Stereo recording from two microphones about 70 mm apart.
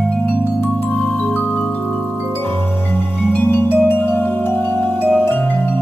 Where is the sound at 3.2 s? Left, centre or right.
Left.